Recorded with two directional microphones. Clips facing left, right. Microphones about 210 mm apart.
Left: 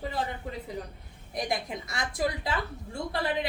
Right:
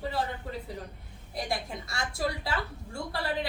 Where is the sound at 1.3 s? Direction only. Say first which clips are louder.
Left 2 dB; 20° left (ahead or behind).